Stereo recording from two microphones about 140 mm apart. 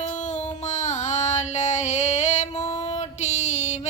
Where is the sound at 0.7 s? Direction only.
55° left (ahead or behind).